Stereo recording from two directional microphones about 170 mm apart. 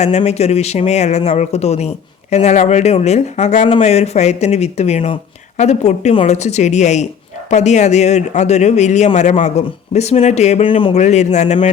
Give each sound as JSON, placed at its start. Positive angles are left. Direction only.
{"t": 0.0, "sound": "speech", "side_deg": 40}
{"t": 10.9, "sound": "speech", "side_deg": 40}